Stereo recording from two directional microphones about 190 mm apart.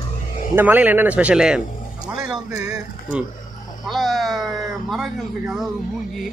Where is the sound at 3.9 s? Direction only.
Centre (ahead or behind).